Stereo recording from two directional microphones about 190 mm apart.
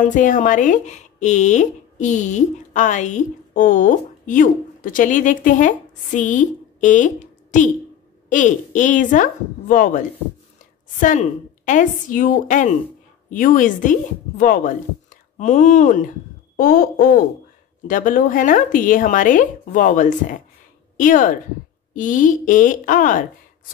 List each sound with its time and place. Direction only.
0.0 s speech: 45° left (ahead or behind)